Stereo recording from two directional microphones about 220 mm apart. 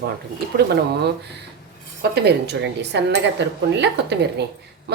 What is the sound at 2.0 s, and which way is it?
A woman's voice, 50° right (ahead or behind).